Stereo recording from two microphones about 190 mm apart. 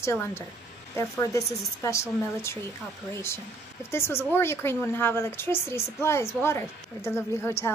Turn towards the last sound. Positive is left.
turn(degrees=15)  # may be behind; listen again after turning